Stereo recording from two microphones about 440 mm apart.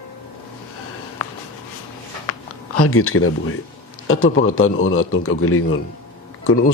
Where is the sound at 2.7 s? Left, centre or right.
Left.